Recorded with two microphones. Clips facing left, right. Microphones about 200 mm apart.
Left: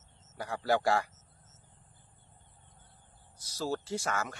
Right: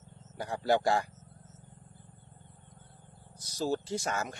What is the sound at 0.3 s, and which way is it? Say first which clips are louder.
Speech: right 2 dB; 25° right (ahead or behind).